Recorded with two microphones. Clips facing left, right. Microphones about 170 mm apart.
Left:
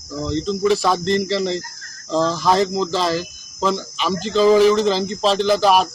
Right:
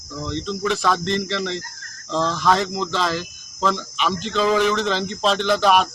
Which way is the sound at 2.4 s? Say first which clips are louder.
Left 3 dB; 35° left (ahead or behind).